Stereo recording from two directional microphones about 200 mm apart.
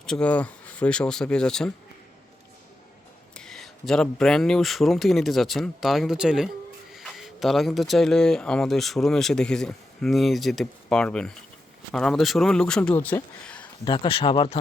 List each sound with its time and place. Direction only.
0.0 s speech: 5° left (ahead or behind)
3.3 s speech: 5° left (ahead or behind)
13.8 s speech: 25° left (ahead or behind)